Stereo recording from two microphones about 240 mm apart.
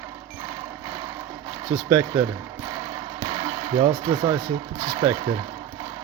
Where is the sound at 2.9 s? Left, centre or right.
Centre.